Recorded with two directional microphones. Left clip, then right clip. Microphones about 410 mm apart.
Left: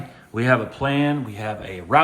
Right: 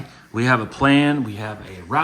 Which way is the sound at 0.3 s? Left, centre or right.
Centre.